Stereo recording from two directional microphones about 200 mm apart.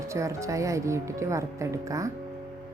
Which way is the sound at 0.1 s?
15° right (ahead or behind).